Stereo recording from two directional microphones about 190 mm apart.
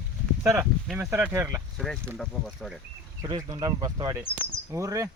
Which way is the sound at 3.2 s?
20° right (ahead or behind).